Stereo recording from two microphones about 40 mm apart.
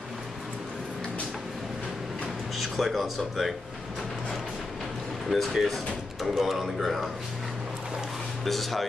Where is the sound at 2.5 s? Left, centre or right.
Centre.